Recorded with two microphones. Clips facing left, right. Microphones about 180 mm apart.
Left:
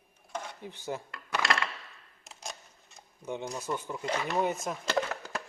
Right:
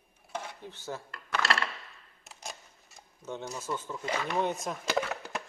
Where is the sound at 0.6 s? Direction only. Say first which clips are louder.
Left 3 dB; 15° left (ahead or behind).